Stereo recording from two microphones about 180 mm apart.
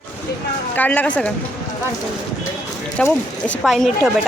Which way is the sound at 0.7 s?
10° left (ahead or behind).